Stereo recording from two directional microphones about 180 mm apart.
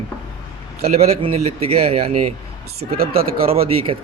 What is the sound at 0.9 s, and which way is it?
A man's voice, 35° right (ahead or behind).